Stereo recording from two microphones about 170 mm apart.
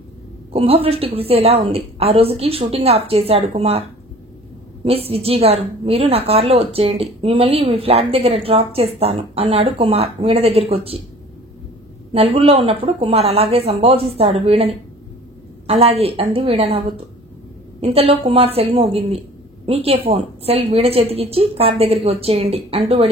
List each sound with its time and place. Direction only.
0.5 s a woman's voice: 35° right (ahead or behind)
4.8 s a woman's voice: 35° right (ahead or behind)
12.1 s a woman's voice: 35° right (ahead or behind)